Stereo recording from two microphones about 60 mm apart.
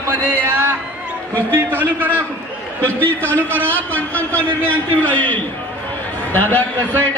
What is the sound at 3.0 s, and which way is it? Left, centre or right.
A man's voice, left.